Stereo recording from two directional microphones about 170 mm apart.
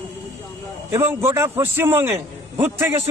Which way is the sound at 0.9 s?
15° right (ahead or behind).